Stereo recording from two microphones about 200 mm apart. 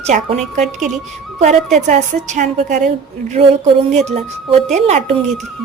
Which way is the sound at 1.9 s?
35° right (ahead or behind).